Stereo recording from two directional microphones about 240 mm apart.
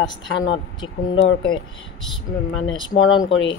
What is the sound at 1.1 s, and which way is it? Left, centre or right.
Speech, left.